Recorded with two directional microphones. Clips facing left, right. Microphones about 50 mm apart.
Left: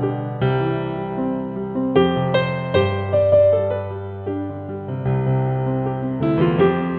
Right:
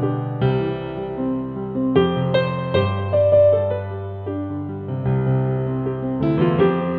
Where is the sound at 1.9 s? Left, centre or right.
Centre.